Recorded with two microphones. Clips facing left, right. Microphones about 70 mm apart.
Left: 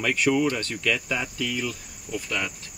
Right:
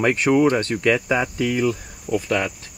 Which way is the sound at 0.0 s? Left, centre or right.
Right.